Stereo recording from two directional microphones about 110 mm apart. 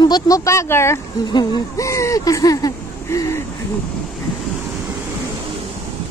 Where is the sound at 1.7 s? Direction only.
25° left (ahead or behind).